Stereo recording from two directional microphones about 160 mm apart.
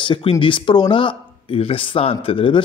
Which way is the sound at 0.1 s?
35° left (ahead or behind).